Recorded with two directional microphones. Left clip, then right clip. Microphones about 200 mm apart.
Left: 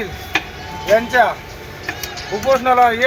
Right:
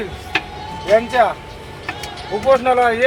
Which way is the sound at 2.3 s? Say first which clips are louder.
Even; 10° right (ahead or behind).